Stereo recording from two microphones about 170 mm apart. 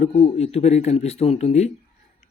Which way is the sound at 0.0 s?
40° left (ahead or behind).